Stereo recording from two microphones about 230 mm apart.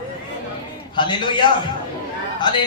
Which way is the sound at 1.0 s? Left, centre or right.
Left.